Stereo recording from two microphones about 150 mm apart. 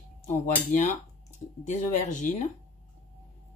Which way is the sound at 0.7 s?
55° left (ahead or behind).